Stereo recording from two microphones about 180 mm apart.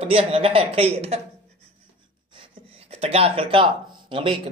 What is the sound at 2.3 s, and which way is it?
Gasp, 30° right (ahead or behind).